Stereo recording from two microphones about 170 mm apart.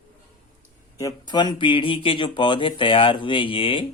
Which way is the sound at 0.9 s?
20° left (ahead or behind).